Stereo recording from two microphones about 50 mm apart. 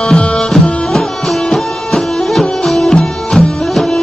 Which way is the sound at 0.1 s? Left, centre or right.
Centre.